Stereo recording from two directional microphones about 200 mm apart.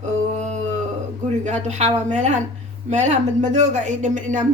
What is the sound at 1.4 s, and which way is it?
Speech, 35° right (ahead or behind).